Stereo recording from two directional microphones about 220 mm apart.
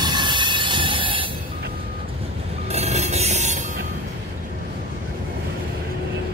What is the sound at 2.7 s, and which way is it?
Train wheels squealing, 30° right (ahead or behind).